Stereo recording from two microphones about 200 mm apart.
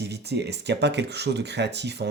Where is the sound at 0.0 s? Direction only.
55° right (ahead or behind).